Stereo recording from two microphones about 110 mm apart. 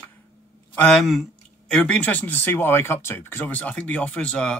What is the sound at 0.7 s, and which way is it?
Speech, 10° left (ahead or behind).